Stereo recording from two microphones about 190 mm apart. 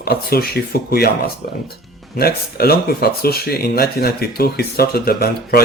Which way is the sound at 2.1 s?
55° left (ahead or behind).